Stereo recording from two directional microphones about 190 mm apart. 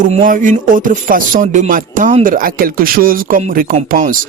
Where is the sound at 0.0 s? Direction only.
45° right (ahead or behind).